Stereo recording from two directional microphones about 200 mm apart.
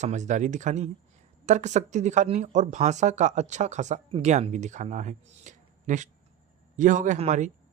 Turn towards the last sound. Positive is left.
turn(degrees=-35)  # may be behind; listen again after turning